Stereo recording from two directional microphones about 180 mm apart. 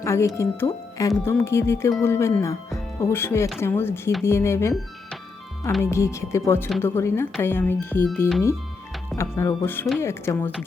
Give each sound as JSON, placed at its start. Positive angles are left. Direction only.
{"t": 0.0, "sound": "speech", "side_deg": 15}
{"t": 5.8, "sound": "speech", "side_deg": 15}
{"t": 9.1, "sound": "speech", "side_deg": 15}